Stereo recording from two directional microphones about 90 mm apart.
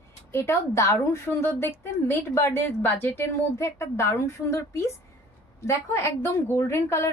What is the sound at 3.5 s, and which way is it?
A woman's voice, 30° left (ahead or behind).